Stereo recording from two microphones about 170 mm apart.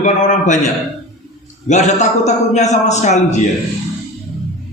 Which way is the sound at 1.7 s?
45° left (ahead or behind).